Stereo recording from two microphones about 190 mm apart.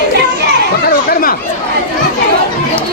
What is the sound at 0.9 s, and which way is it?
Chatter, 50° left (ahead or behind).